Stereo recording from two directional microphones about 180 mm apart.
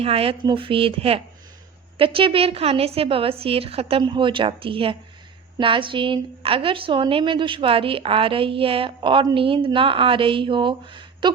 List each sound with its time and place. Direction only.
0.0 s a woman's voice: 30° right (ahead or behind)